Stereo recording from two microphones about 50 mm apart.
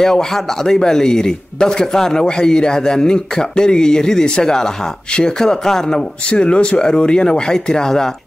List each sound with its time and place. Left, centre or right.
0.0 s speech: centre